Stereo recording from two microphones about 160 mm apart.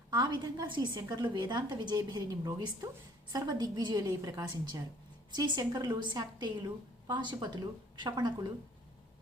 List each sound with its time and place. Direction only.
0.1 s a woman's voice: 30° right (ahead or behind)